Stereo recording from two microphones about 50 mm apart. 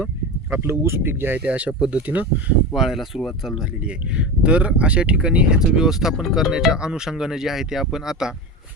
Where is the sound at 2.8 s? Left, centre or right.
Centre.